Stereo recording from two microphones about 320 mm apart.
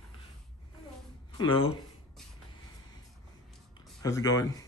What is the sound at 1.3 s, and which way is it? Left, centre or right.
Speech, centre.